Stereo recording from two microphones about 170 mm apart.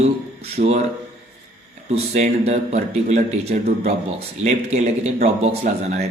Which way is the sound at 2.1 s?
45° right (ahead or behind).